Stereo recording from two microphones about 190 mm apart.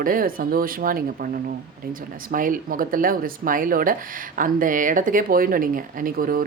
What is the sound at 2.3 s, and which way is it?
Speech, 45° right (ahead or behind).